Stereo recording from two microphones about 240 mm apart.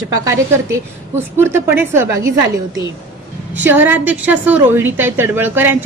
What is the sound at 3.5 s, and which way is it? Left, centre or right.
A woman's voice, centre.